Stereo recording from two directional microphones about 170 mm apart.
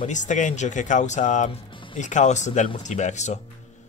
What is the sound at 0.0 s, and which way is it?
Speech, 45° left (ahead or behind).